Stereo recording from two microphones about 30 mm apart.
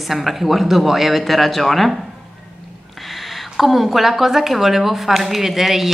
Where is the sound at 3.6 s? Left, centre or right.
Centre.